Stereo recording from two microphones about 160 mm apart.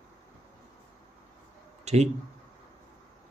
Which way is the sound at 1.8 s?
45° right (ahead or behind).